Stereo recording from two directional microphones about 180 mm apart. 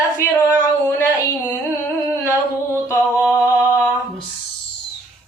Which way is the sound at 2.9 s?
15° left (ahead or behind).